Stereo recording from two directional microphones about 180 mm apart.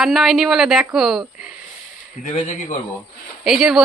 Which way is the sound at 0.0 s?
Centre (ahead or behind).